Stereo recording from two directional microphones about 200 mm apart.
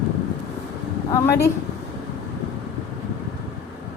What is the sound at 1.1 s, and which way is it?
Speech, 15° left (ahead or behind).